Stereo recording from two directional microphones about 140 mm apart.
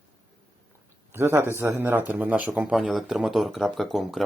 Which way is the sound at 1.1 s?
15° right (ahead or behind).